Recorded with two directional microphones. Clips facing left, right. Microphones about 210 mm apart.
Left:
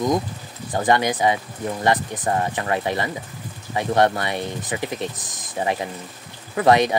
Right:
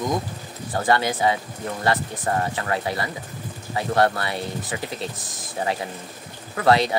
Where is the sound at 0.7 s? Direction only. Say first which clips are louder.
Left 2 dB; 15° left (ahead or behind).